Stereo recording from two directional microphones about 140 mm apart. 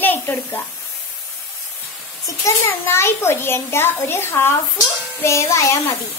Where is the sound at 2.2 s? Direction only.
20° left (ahead or behind).